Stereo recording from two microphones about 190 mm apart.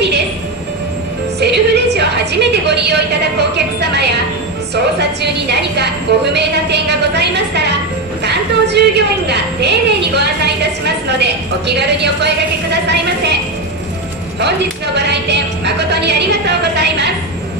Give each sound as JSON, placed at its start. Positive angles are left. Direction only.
{"t": 1.4, "sound": "music", "side_deg": -60}
{"t": 2.5, "sound": "a woman's voice", "side_deg": -65}
{"t": 15.0, "sound": "a woman's voice", "side_deg": -65}